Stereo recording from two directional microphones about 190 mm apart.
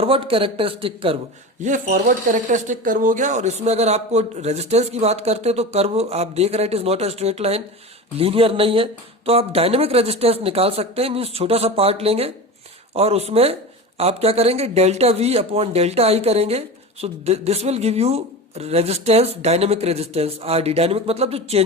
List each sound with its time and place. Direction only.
0.0 s speech: 30° right (ahead or behind)
1.6 s speech: 45° right (ahead or behind)